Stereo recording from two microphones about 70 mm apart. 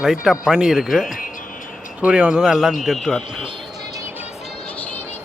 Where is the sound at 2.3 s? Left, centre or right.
Centre.